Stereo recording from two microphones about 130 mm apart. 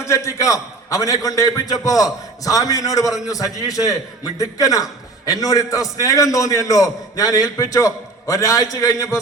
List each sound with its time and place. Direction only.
0.0 s a man's voice: 25° left (ahead or behind)